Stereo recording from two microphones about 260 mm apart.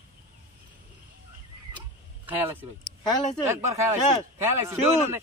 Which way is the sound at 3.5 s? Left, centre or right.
Centre.